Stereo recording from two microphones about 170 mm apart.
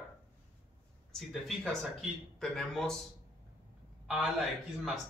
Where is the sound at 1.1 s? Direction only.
Centre (ahead or behind).